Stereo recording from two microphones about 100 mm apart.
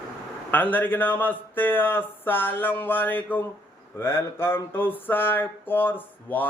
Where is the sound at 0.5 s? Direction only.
20° left (ahead or behind).